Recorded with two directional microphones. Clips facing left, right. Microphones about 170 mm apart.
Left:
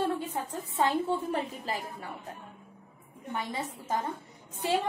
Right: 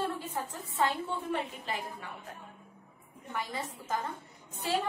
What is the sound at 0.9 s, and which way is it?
A woman's voice, 40° left (ahead or behind).